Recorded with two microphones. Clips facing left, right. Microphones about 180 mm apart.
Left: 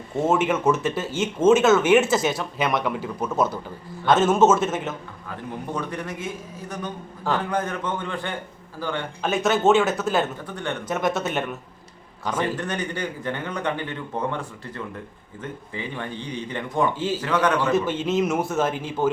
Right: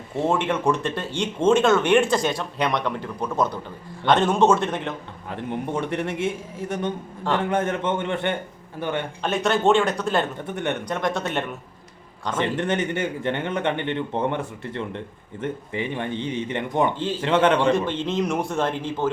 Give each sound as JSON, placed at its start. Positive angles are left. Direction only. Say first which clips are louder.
{"t": 0.2, "sound": "speech", "louder": "left 1 dB", "side_deg": 5}
{"t": 5.3, "sound": "speech", "louder": "right 4 dB", "side_deg": -25}
{"t": 9.2, "sound": "speech", "louder": "left 1 dB", "side_deg": 0}
{"t": 10.4, "sound": "speech", "louder": "right 3 dB", "side_deg": -20}
{"t": 10.8, "sound": "speech", "louder": "left 1 dB", "side_deg": 5}
{"t": 12.3, "sound": "speech", "louder": "right 2 dB", "side_deg": -25}
{"t": 17.8, "sound": "speech", "louder": "left 2 dB", "side_deg": 5}